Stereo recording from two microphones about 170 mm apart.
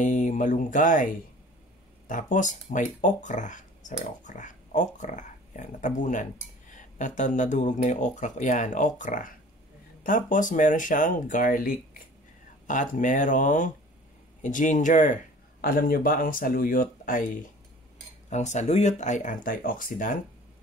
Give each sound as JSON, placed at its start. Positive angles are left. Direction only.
{"t": 0.0, "sound": "speech", "side_deg": 45}
{"t": 15.6, "sound": "speech", "side_deg": 60}
{"t": 18.3, "sound": "speech", "side_deg": 45}